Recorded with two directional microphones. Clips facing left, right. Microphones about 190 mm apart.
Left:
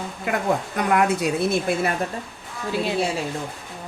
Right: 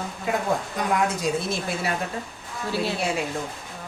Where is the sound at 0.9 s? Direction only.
65° left (ahead or behind).